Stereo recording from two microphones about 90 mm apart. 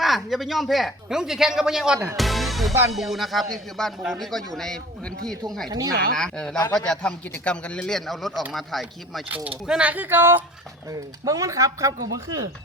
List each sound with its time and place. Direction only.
0.0 s speech: centre (ahead or behind)
2.1 s music: centre (ahead or behind)
2.9 s speech: centre (ahead or behind)
5.6 s speech: 45° right (ahead or behind)
6.1 s a man's voice: 5° left (ahead or behind)
9.6 s speech: 10° right (ahead or behind)
11.3 s speech: 35° right (ahead or behind)